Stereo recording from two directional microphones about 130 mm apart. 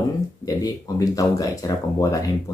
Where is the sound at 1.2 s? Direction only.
25° left (ahead or behind).